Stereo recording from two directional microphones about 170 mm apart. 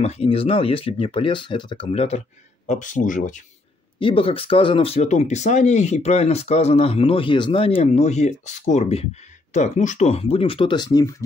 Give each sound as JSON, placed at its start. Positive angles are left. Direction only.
{"t": 0.0, "sound": "speech", "side_deg": 35}
{"t": 4.0, "sound": "speech", "side_deg": 30}